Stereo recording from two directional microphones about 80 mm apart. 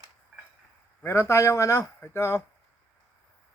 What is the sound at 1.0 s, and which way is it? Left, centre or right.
Speech, left.